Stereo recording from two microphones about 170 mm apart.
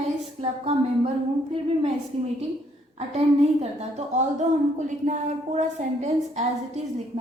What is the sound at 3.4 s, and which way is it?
A woman's voice, 40° right (ahead or behind).